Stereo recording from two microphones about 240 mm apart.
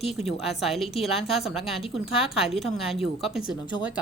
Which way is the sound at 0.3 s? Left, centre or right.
Centre.